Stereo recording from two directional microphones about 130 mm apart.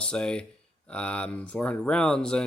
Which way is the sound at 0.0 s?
5° left (ahead or behind).